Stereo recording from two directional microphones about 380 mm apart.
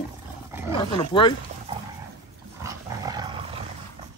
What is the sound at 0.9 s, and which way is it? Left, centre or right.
Speech, centre.